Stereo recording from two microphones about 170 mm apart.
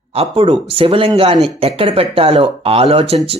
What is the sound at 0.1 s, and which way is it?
Speech, 35° right (ahead or behind).